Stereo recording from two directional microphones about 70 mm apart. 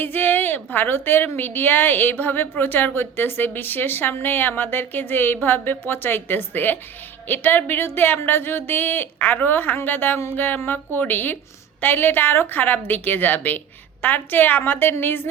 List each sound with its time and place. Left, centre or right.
0.0 s a woman's voice: left